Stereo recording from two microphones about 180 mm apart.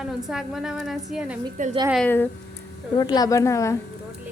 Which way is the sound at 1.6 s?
45° right (ahead or behind).